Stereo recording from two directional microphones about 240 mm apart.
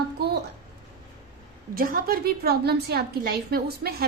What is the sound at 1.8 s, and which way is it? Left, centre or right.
A woman's voice, right.